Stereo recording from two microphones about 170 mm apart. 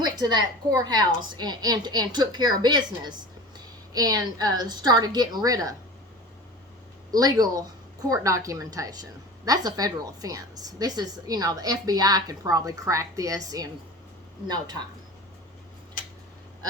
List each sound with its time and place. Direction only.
0.0 s a woman's voice: 25° right (ahead or behind)
7.1 s a woman's voice: 20° right (ahead or behind)